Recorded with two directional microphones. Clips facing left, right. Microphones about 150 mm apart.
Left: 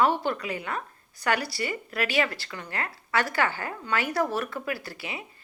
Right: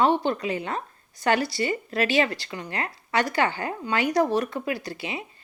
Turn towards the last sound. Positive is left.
turn(degrees=-20)  # may be behind; listen again after turning